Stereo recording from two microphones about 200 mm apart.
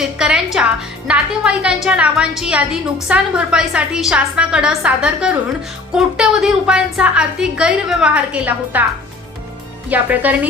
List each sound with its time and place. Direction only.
0.2 s a woman's voice: 5° right (ahead or behind)
9.9 s speech: 10° right (ahead or behind)